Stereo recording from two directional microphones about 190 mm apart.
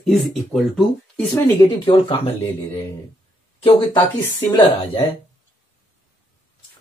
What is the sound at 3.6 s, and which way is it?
Speech, 25° left (ahead or behind).